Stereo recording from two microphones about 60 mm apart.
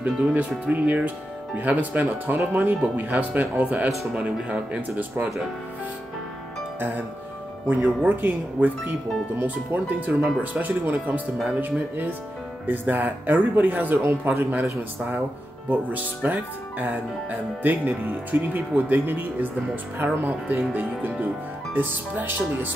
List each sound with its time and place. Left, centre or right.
0.0 s speech: right
3.9 s speech: centre
4.2 s speech: right
7.6 s speech: right